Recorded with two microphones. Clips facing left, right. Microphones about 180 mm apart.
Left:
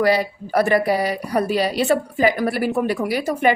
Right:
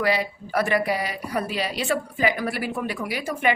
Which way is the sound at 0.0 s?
40° left (ahead or behind).